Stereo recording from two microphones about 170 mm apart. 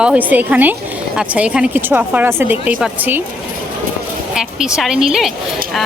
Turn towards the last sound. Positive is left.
turn(degrees=0)  # may be behind; listen again after turning